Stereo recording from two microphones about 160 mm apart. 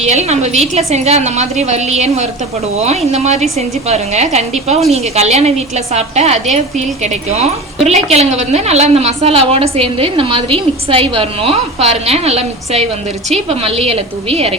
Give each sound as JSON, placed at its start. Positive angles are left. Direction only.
{"t": 0.0, "sound": "a woman's voice", "side_deg": -45}